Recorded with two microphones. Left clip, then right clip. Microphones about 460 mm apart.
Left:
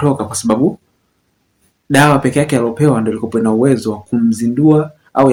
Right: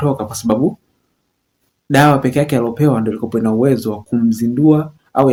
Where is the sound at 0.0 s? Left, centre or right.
Right.